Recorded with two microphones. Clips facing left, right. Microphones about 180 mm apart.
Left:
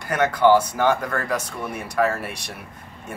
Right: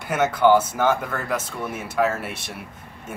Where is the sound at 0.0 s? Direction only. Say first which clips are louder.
Even; 5° right (ahead or behind).